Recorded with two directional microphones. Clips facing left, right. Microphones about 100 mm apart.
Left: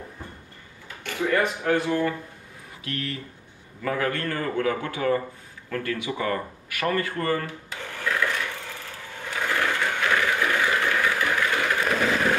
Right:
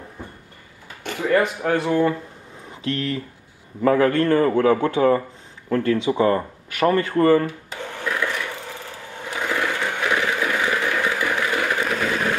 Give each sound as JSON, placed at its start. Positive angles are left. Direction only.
{"t": 1.0, "sound": "a man's voice", "side_deg": -25}
{"t": 7.7, "sound": "filing", "side_deg": -20}
{"t": 9.1, "sound": "a sound", "side_deg": -20}